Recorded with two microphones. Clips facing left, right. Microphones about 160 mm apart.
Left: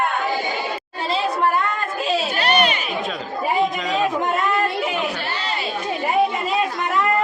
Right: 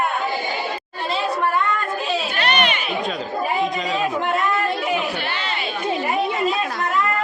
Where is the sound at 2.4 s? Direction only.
35° left (ahead or behind).